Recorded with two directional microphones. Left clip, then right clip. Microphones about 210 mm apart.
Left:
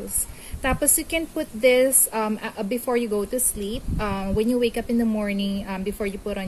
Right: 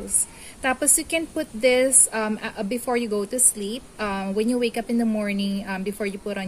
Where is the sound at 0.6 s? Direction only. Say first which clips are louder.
Right 1 dB; 15° right (ahead or behind).